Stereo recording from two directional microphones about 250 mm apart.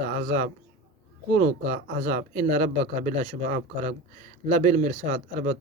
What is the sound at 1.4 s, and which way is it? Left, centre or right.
Speech, right.